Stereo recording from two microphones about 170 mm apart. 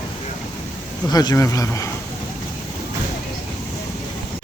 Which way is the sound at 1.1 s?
20° left (ahead or behind).